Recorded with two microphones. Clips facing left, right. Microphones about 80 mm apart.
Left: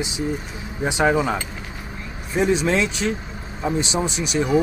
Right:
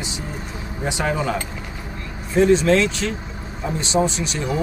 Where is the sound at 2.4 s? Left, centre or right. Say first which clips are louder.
Right 4 dB; centre.